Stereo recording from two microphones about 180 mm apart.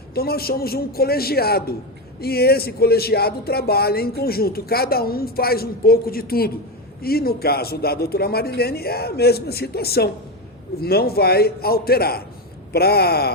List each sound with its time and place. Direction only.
0.1 s speech: 60° left (ahead or behind)